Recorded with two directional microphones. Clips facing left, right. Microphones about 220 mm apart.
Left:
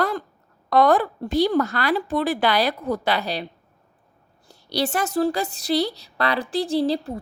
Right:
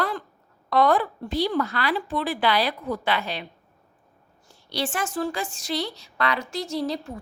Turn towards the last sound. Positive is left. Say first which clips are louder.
# left 6 dB
turn(degrees=35)  # may be behind; listen again after turning